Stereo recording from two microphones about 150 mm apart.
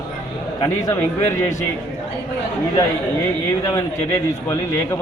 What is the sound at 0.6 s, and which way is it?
Speech, 25° left (ahead or behind).